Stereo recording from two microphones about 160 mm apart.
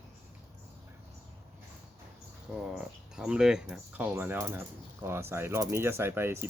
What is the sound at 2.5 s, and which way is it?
Speech, 5° right (ahead or behind).